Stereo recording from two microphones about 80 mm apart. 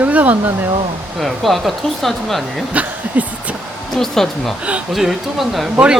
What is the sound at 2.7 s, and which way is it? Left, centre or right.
Chuckle, centre.